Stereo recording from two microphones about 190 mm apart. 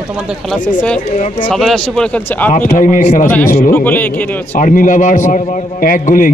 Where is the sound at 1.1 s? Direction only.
35° left (ahead or behind).